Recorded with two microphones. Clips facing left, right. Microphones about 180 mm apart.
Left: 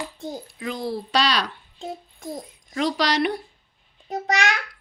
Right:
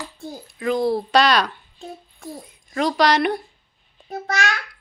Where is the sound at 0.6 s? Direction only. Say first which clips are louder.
Right 9 dB; 55° right (ahead or behind).